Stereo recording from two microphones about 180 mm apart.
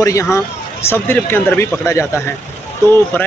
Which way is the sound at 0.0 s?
15° left (ahead or behind).